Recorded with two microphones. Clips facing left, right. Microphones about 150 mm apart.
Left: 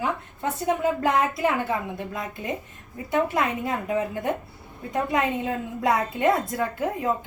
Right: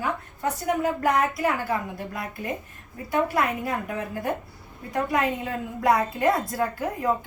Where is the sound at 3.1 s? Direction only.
20° left (ahead or behind).